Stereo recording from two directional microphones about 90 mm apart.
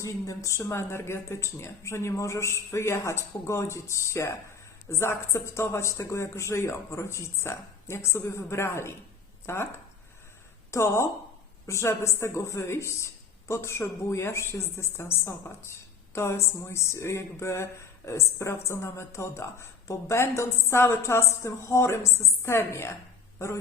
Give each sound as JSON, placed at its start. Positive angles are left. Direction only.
{"t": 0.0, "sound": "speech", "side_deg": 35}
{"t": 10.7, "sound": "a woman's voice", "side_deg": 30}